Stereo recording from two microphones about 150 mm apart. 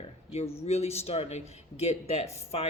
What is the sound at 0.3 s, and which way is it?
A man's voice, 40° left (ahead or behind).